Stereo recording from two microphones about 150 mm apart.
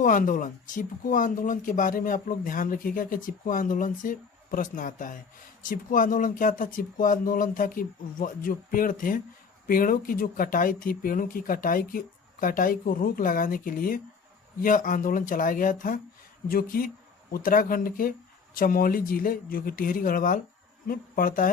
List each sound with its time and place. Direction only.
0.0 s speech: 65° left (ahead or behind)
16.5 s speech: 75° left (ahead or behind)